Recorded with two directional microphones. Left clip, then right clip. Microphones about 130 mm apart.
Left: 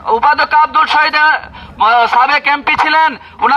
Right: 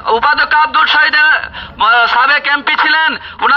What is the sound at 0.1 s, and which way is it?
A man's voice, 60° left (ahead or behind).